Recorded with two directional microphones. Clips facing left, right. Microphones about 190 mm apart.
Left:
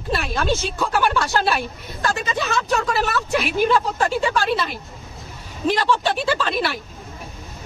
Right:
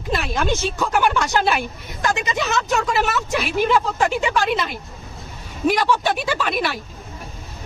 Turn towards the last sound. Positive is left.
turn(degrees=-15)  # may be behind; listen again after turning